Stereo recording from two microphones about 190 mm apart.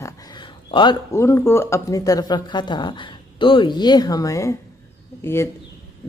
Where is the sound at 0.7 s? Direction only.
25° left (ahead or behind).